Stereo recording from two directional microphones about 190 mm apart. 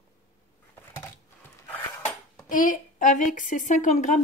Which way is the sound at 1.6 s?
10° left (ahead or behind).